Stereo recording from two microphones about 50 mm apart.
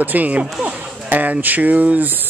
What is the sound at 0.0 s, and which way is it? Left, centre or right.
Speech, right.